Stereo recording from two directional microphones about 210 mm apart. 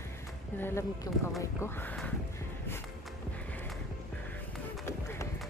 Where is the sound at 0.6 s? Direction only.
10° left (ahead or behind).